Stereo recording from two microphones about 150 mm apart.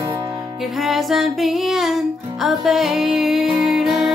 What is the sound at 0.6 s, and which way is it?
Music, centre (ahead or behind).